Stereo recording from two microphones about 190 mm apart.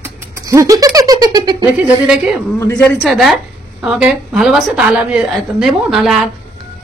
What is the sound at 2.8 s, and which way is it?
A woman's voice, 5° left (ahead or behind).